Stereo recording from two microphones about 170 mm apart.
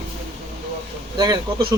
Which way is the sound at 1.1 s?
25° right (ahead or behind).